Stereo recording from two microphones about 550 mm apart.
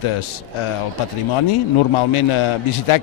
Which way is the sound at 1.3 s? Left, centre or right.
Left.